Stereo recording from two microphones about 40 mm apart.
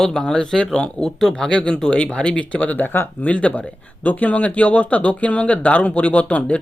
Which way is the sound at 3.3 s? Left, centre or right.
Left.